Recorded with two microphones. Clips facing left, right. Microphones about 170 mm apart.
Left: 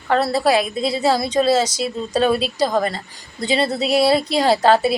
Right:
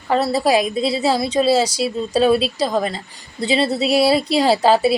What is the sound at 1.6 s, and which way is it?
Speech, 30° right (ahead or behind).